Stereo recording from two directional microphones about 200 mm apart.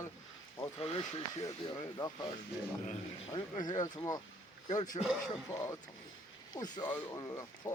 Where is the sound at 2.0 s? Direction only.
20° left (ahead or behind).